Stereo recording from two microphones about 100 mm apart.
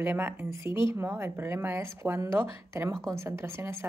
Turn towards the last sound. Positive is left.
turn(degrees=-25)  # may be behind; listen again after turning